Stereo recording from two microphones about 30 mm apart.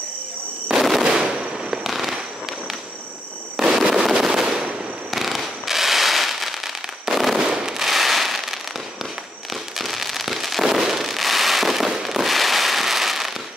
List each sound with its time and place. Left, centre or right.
0.7 s fireworks: centre
1.0 s machine gun: right
1.8 s fireworks: centre
3.7 s fireworks: centre
5.1 s fireworks: centre
7.3 s fireworks: right
7.8 s fireworks: centre